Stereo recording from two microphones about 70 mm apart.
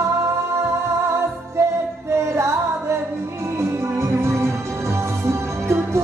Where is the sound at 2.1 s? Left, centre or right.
Right.